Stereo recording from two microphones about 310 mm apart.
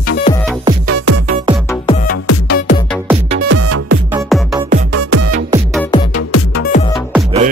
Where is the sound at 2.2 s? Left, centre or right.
Left.